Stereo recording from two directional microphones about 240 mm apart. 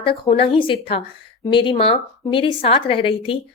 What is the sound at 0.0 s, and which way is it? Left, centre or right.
A woman's voice, left.